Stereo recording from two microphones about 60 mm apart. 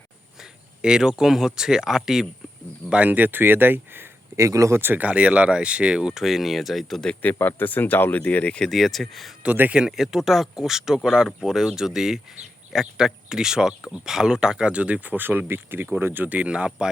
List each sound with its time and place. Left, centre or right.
0.8 s speech: centre
2.9 s speech: right
4.4 s speech: right
4.8 s speech: right
5.0 s speech: centre
7.3 s speech: left
8.5 s speech: centre
9.4 s speech: right
9.8 s speech: centre; by 16.2 s right
16.2 s speech: right